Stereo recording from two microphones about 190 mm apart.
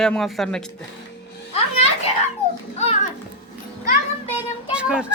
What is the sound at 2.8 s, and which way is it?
Speech, 35° left (ahead or behind).